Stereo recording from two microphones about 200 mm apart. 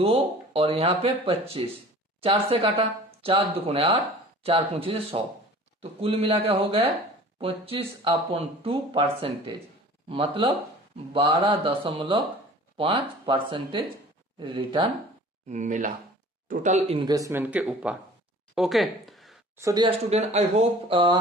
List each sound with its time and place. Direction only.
0.0 s speech: 30° right (ahead or behind)
15.4 s speech: 35° right (ahead or behind); by 19.4 s centre (ahead or behind)
19.5 s speech: 20° right (ahead or behind)